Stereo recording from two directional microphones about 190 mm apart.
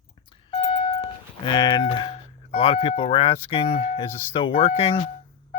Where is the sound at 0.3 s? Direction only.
25° left (ahead or behind).